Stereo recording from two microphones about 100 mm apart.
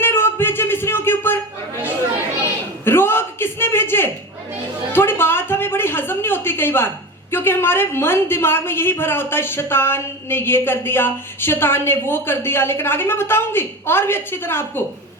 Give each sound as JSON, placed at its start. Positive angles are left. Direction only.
{"t": 0.0, "sound": "music", "side_deg": 25}
{"t": 2.8, "sound": "a sound", "side_deg": 20}
{"t": 4.9, "sound": "speech", "side_deg": 20}